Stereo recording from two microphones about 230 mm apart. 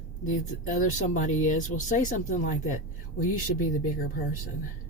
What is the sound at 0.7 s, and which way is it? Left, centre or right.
Speech, left.